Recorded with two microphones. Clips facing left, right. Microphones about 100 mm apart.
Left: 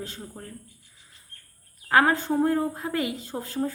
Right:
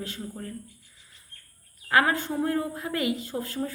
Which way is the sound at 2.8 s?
30° left (ahead or behind).